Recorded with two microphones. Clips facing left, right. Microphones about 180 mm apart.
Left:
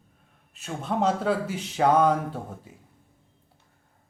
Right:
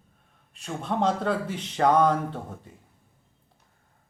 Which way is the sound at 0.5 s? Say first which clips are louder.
Even; 5° left (ahead or behind).